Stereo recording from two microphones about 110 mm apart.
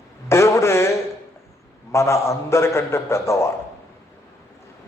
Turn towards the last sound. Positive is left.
turn(degrees=25)  # may be behind; listen again after turning